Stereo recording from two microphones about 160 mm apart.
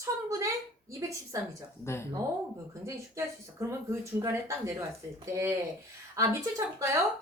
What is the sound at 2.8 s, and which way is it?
Speech, 15° right (ahead or behind).